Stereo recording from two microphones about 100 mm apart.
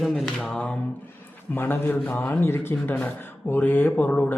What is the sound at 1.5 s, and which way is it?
Speech, 20° left (ahead or behind).